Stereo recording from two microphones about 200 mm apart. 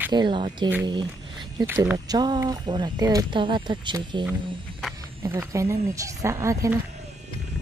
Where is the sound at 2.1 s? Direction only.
20° right (ahead or behind).